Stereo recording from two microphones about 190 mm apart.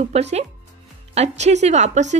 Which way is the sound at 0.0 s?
35° right (ahead or behind).